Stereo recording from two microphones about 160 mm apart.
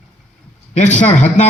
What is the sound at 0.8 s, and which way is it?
Speech, 50° left (ahead or behind).